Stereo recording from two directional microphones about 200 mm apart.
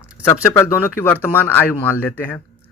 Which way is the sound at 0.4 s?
10° left (ahead or behind).